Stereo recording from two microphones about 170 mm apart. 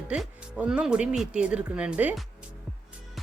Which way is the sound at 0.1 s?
5° right (ahead or behind).